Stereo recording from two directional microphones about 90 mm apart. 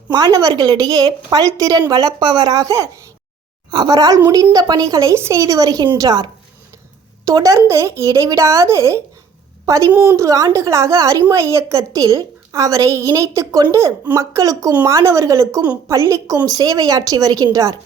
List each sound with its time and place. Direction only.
0.1 s a woman's voice: 45° right (ahead or behind)
3.7 s a woman's voice: 50° right (ahead or behind)
7.3 s a woman's voice: 35° right (ahead or behind)